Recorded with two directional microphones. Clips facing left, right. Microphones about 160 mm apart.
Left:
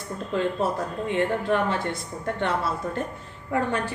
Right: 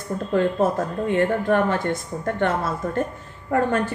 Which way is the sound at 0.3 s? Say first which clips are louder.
Right 5 dB; 50° right (ahead or behind).